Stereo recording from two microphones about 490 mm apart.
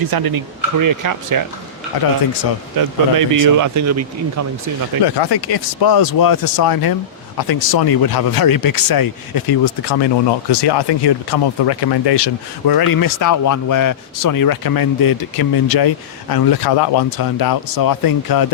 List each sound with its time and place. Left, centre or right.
0.0 s speech: right
2.7 s speech: right
5.0 s speech: left